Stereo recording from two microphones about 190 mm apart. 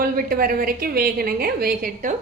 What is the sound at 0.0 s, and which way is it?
A woman's voice, 50° right (ahead or behind).